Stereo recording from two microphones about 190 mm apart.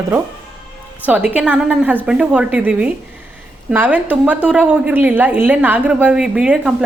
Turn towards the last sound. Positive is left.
turn(degrees=-5)  # may be behind; listen again after turning